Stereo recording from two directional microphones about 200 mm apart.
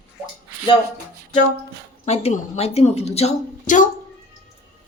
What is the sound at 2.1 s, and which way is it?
A woman's voice, 35° left (ahead or behind).